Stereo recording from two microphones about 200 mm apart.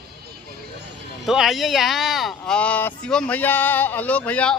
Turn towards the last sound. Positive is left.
turn(degrees=5)  # may be behind; listen again after turning